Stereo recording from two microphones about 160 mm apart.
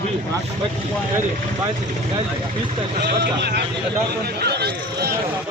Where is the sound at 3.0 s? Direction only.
90° right.